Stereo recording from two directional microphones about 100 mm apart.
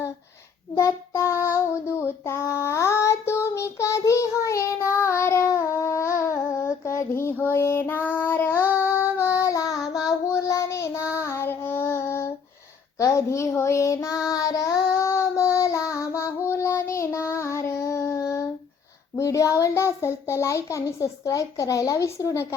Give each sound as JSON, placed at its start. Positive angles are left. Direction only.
{"t": 0.8, "sound": "child singing", "side_deg": 30}
{"t": 9.7, "sound": "child singing", "side_deg": -5}
{"t": 10.3, "sound": "child singing", "side_deg": 30}
{"t": 19.1, "sound": "a child's voice", "side_deg": 35}